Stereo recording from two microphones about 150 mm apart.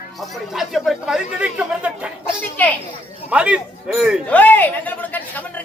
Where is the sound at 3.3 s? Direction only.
10° right (ahead or behind).